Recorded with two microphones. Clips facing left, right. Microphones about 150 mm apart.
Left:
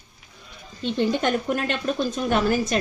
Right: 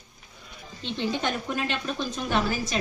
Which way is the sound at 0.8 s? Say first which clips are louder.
Left 6 dB; 50° left (ahead or behind).